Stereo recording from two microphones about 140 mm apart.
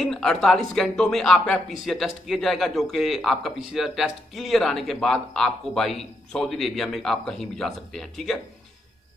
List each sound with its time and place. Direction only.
0.0 s speech: 5° left (ahead or behind)